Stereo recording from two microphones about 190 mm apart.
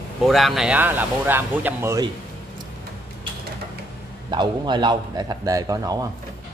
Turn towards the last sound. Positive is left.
turn(degrees=-20)  # may be behind; listen again after turning